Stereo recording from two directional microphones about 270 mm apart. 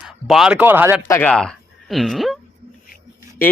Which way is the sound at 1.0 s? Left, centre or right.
Centre.